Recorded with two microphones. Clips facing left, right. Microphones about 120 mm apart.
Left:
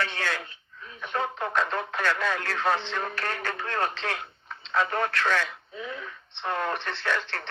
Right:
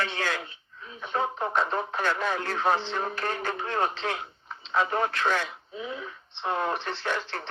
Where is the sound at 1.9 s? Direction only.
75° left (ahead or behind).